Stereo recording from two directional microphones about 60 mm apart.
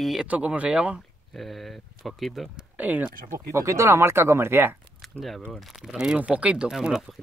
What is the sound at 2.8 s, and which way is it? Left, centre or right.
Speech, right.